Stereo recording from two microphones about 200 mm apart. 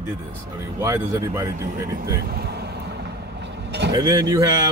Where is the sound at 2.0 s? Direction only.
50° right (ahead or behind).